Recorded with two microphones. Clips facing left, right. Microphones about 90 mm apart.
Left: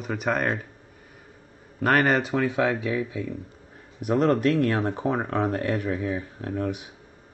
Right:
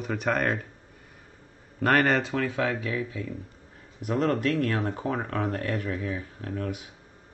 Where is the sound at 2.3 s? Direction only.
20° left (ahead or behind).